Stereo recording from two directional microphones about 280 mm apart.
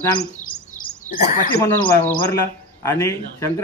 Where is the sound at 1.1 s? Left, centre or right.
Left.